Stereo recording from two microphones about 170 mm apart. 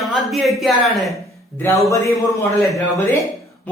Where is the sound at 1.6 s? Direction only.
15° left (ahead or behind).